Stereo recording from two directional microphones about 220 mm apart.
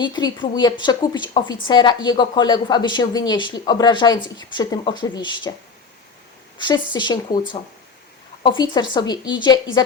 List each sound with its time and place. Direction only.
0.0 s a woman's voice: 20° left (ahead or behind)
6.6 s a woman's voice: 20° left (ahead or behind)
8.4 s a woman's voice: 20° left (ahead or behind)